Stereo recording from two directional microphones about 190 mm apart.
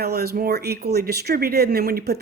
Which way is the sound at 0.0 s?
55° right (ahead or behind).